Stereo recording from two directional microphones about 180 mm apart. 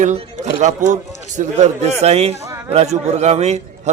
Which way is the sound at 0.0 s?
40° right (ahead or behind).